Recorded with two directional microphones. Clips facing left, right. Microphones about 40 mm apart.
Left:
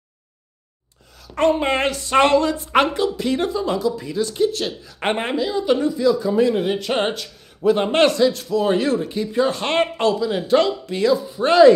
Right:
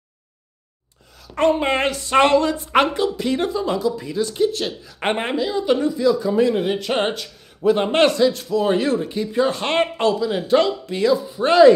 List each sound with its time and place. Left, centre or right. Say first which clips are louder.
1.2 s a woman's voice: even; right